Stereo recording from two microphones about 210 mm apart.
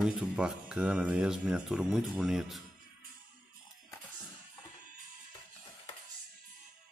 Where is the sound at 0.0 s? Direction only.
5° right (ahead or behind).